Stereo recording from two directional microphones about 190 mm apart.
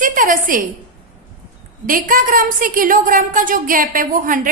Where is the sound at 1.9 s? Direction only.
45° right (ahead or behind).